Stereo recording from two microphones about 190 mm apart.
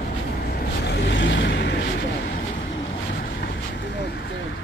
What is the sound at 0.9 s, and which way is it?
Boat, 65° left (ahead or behind).